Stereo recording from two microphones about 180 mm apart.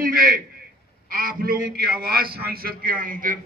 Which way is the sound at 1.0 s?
55° right (ahead or behind).